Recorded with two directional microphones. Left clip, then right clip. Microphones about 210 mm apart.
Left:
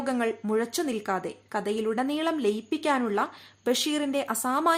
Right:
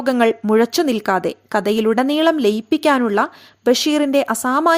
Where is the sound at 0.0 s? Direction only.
40° right (ahead or behind).